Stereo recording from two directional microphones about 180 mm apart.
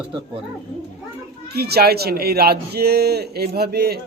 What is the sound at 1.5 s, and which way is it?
Speech, 60° right (ahead or behind).